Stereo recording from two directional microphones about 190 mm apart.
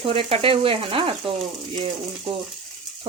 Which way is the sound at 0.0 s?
30° right (ahead or behind).